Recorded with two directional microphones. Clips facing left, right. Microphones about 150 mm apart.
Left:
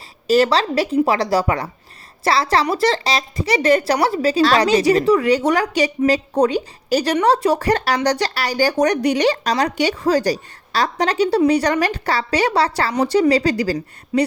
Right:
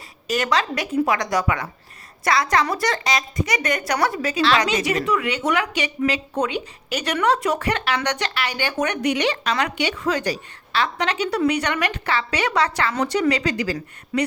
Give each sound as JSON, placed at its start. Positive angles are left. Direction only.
{"t": 0.3, "sound": "speech", "side_deg": 35}
{"t": 14.1, "sound": "speech", "side_deg": 20}